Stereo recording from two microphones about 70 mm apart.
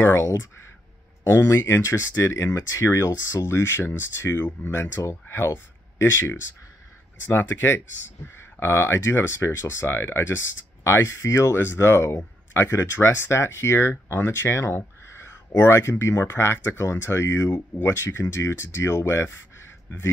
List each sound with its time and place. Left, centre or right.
0.0 s speech: left